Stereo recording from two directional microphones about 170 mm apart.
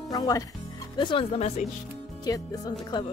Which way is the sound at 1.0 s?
30° left (ahead or behind).